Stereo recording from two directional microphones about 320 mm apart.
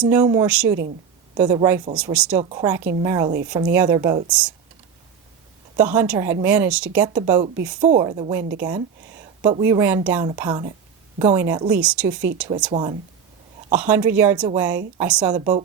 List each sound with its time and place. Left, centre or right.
0.0 s a woman's voice: centre
2.4 s a woman's voice: centre
5.7 s a woman's voice: centre
12.7 s a woman's voice: centre
13.7 s a woman's voice: centre
15.4 s a woman's voice: centre